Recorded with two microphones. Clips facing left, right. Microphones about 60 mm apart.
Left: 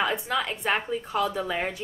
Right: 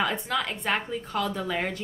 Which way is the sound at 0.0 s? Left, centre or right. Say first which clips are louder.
Left 1 dB; centre.